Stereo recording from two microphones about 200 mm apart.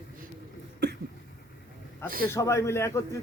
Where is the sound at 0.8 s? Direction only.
55° right (ahead or behind).